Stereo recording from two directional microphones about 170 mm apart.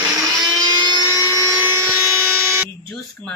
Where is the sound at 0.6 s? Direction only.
25° right (ahead or behind).